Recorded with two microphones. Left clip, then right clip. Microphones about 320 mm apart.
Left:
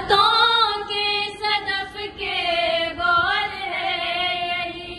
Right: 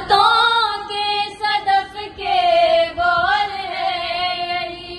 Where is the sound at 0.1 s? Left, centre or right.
Right.